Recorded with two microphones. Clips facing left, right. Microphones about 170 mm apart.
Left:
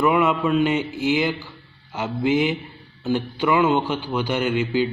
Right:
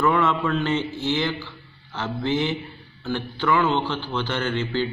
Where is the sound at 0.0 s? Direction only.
15° left (ahead or behind).